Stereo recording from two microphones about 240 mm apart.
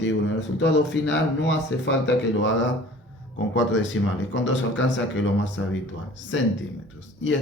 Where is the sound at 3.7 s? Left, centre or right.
Left.